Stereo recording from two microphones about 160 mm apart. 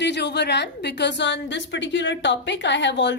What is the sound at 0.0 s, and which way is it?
A woman's voice, 90° left.